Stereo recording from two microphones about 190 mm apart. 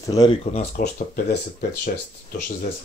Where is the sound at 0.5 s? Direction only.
45° left (ahead or behind).